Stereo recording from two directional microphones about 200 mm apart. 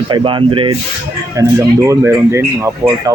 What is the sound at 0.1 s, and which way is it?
Speech, 25° right (ahead or behind).